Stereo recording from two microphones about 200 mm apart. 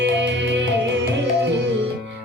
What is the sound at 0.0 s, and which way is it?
Music, 60° right (ahead or behind).